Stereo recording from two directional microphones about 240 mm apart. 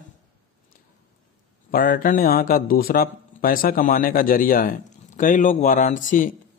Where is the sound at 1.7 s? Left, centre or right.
Left.